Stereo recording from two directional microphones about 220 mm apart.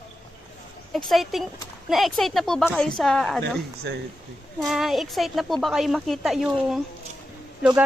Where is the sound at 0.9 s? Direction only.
Centre (ahead or behind).